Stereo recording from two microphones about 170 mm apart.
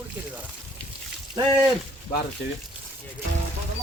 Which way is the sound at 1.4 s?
25° right (ahead or behind).